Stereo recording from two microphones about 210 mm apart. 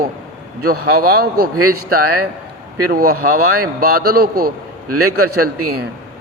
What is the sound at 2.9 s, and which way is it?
A man's voice, 45° right (ahead or behind).